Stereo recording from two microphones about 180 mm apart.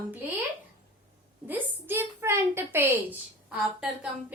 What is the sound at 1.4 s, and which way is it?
A woman's voice, 10° right (ahead or behind).